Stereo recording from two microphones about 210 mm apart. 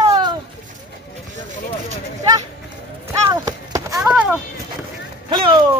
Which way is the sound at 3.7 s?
15° right (ahead or behind).